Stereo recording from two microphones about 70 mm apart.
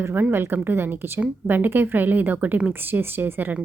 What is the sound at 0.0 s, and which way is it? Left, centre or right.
A woman's voice, right.